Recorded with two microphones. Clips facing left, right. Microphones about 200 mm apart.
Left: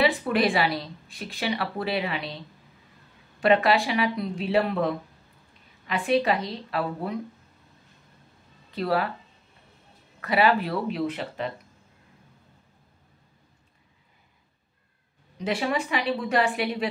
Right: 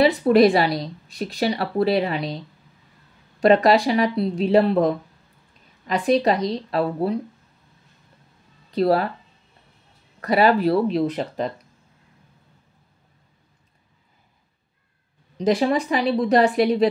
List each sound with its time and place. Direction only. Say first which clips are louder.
0.0 s a woman's voice: right 8 dB; 40° right (ahead or behind)
8.7 s a woman's voice: right 7 dB; 40° right (ahead or behind)
10.2 s a woman's voice: right 5 dB; 40° right (ahead or behind)
15.3 s a woman's voice: right 7 dB; 35° right (ahead or behind)